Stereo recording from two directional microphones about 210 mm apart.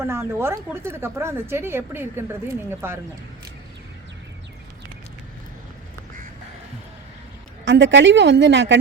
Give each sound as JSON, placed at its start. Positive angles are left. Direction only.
{"t": 0.0, "sound": "a woman's voice", "side_deg": -10}
{"t": 7.6, "sound": "speech", "side_deg": -60}